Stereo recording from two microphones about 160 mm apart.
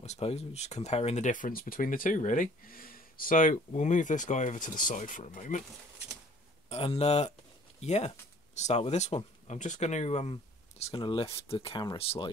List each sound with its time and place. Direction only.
0.0 s speech: 40° left (ahead or behind)
6.7 s speech: 40° left (ahead or behind)